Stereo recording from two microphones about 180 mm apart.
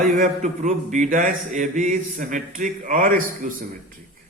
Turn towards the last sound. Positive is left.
turn(degrees=-50)  # may be behind; listen again after turning